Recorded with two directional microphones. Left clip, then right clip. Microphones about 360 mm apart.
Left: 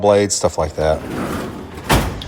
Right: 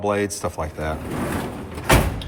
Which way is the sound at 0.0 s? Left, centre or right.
Centre.